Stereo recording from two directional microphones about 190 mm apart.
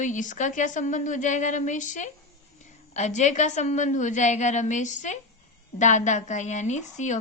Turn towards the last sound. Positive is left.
turn(degrees=40)  # may be behind; listen again after turning